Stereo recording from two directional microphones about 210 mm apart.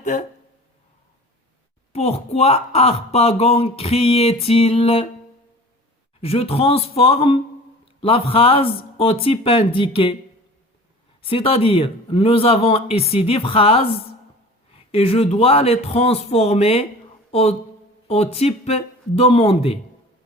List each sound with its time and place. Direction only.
0.0 s speech: 35° left (ahead or behind)
1.9 s speech: 30° left (ahead or behind)
6.2 s speech: 30° left (ahead or behind)
11.2 s speech: 25° left (ahead or behind)